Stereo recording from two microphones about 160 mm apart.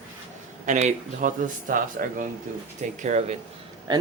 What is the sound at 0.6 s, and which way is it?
Speech, 50° right (ahead or behind).